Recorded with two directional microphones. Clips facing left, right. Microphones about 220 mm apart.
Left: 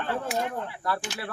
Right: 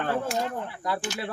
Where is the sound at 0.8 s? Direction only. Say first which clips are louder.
Even; 15° right (ahead or behind).